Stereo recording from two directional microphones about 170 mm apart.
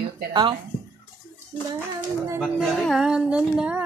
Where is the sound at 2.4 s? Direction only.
Centre (ahead or behind).